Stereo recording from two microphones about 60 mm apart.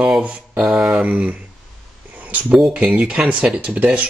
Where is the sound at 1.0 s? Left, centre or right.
Right.